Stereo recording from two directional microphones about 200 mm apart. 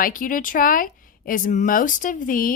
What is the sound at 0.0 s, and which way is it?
A woman's voice, 45° left (ahead or behind).